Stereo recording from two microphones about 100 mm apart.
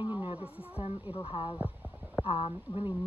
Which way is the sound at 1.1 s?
65° left (ahead or behind).